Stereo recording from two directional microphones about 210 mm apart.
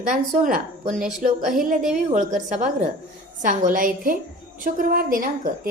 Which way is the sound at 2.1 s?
35° right (ahead or behind).